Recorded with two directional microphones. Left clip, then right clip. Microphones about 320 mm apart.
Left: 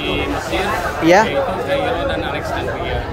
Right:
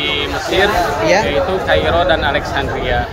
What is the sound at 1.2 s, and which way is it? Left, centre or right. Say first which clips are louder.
Speech: right 3 dB; centre.